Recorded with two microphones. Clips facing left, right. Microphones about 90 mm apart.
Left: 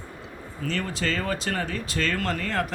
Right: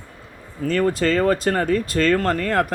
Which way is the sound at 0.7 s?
45° right (ahead or behind).